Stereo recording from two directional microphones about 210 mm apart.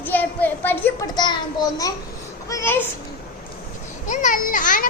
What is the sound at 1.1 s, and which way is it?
A child's voice, 20° left (ahead or behind).